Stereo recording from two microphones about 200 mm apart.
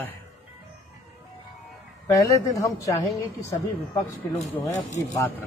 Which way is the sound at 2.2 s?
15° left (ahead or behind).